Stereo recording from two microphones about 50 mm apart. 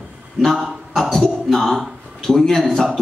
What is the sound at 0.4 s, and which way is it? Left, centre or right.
A man's voice, centre.